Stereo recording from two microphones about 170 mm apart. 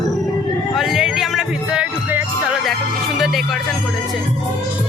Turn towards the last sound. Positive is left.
turn(degrees=0)  # may be behind; listen again after turning